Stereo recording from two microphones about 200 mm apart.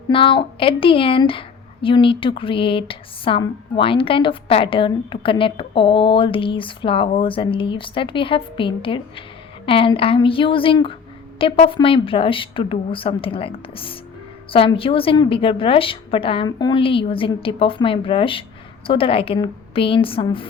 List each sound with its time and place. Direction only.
0.1 s a woman's voice: 25° left (ahead or behind)